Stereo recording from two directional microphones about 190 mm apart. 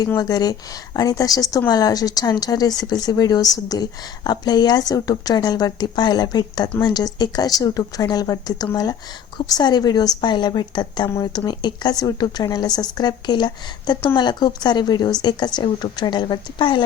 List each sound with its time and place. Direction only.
0.0 s a woman's voice: 20° left (ahead or behind)